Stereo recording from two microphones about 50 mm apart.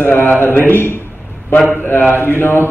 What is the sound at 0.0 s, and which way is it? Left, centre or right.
Speech, left.